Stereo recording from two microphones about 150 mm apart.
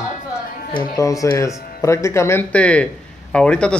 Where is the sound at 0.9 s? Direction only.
20° left (ahead or behind).